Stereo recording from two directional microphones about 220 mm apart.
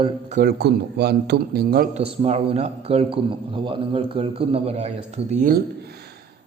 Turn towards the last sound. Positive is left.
turn(degrees=-35)  # may be behind; listen again after turning